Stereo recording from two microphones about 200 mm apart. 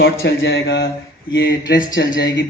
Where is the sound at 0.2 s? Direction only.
70° left (ahead or behind).